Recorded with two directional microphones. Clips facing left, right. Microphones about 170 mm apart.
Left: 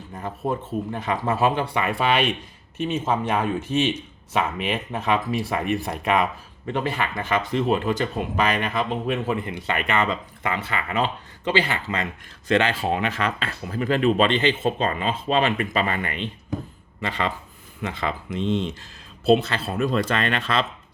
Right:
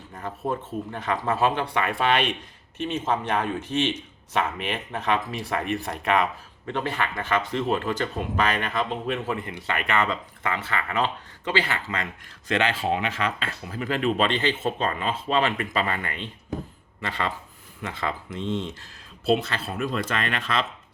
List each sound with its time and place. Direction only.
0.9 s speech: 10° left (ahead or behind)
12.5 s speech: 35° left (ahead or behind)
14.2 s speech: 20° left (ahead or behind)